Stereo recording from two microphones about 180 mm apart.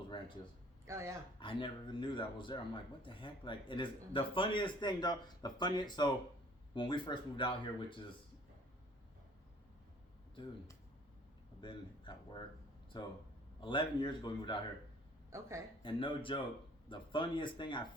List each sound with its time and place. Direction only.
0.9 s a man's voice: 15° right (ahead or behind)
1.4 s speech: 25° left (ahead or behind)
11.6 s speech: 25° left (ahead or behind)
15.3 s a man's voice: 15° right (ahead or behind)
15.8 s speech: 30° left (ahead or behind)